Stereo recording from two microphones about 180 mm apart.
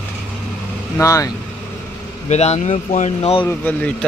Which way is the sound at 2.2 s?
40° left (ahead or behind).